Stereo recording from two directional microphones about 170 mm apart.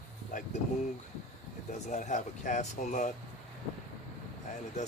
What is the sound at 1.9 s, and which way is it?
Speech, 45° left (ahead or behind).